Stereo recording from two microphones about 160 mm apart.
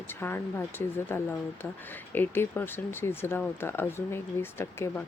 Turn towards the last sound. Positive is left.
turn(degrees=15)  # may be behind; listen again after turning